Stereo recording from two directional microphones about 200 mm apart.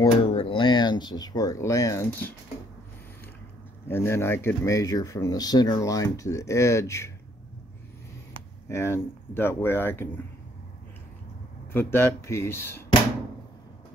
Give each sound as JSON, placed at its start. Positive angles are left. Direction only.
{"t": 0.0, "sound": "a sound", "side_deg": 30}
{"t": 3.9, "sound": "speech", "side_deg": 10}
{"t": 8.6, "sound": "speech", "side_deg": 15}
{"t": 11.7, "sound": "speech", "side_deg": 10}